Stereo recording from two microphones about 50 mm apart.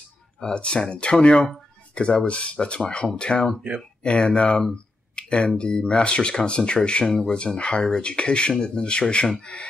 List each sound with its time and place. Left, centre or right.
0.4 s speech: centre
5.1 s a sound: centre
5.6 s speech: centre